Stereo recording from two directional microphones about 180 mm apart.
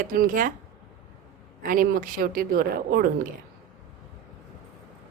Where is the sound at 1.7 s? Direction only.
50° right (ahead or behind).